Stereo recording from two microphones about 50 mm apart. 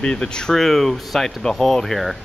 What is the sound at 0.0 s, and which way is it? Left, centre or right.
Speech, centre.